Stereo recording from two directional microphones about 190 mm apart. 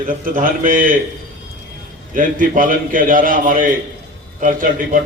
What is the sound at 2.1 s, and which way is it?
A man's voice, 45° right (ahead or behind).